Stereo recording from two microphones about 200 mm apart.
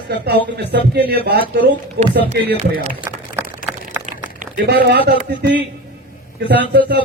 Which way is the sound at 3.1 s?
15° right (ahead or behind).